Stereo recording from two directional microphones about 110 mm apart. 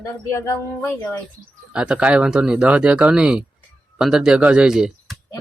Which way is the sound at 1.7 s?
10° right (ahead or behind).